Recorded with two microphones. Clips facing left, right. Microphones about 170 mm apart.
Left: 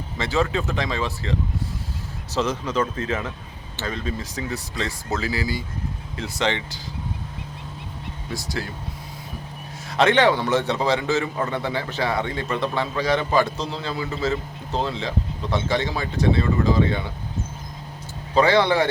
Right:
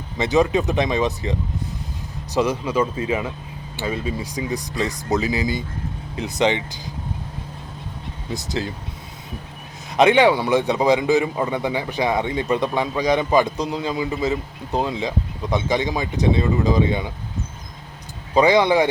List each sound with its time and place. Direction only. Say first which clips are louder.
0.2 s a man's voice: right 5 dB; 20° right (ahead or behind)
8.3 s speech: right 4 dB; 20° right (ahead or behind)
9.9 s a man's voice: right 3 dB; 15° right (ahead or behind)
18.3 s a man's voice: right 2 dB; 15° right (ahead or behind)